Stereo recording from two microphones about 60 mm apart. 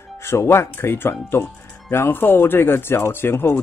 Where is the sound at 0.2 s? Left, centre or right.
Left.